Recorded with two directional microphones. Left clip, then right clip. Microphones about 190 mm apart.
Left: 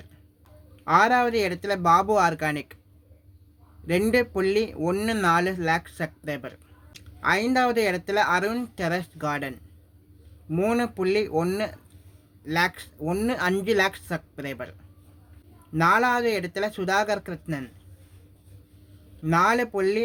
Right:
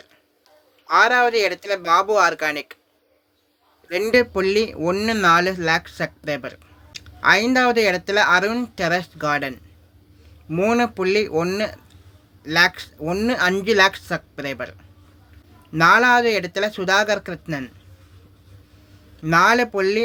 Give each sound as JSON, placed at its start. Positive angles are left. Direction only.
{"t": 0.9, "sound": "speech", "side_deg": 20}
{"t": 3.8, "sound": "speech", "side_deg": 20}
{"t": 19.2, "sound": "speech", "side_deg": 20}